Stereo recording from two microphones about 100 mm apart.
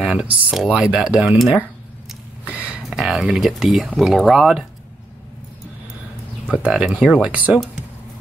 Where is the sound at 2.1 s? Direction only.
10° right (ahead or behind).